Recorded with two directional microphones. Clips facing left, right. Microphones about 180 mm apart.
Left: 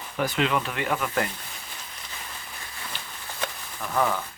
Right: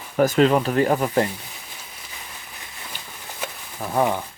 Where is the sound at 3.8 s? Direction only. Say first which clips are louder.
Right 4 dB; 30° right (ahead or behind).